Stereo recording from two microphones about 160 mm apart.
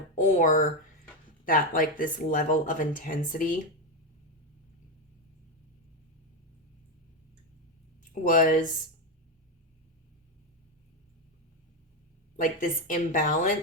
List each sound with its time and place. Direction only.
0.2 s speech: 55° left (ahead or behind)
8.3 s speech: 55° left (ahead or behind)
12.4 s speech: 55° left (ahead or behind)